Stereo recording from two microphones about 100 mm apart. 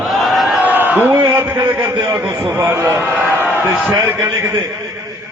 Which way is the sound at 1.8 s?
35° right (ahead or behind).